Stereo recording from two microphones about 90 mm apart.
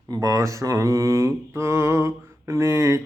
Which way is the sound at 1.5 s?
30° right (ahead or behind).